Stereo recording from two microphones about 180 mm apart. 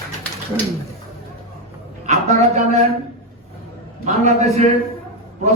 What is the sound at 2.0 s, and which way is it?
Speech, 40° right (ahead or behind).